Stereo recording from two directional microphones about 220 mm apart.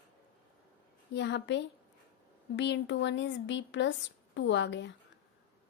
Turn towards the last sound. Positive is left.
turn(degrees=55)  # may be behind; listen again after turning